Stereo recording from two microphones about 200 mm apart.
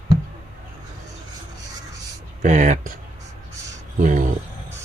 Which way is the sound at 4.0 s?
40° right (ahead or behind).